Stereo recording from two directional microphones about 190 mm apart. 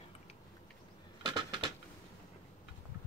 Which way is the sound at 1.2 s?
25° right (ahead or behind).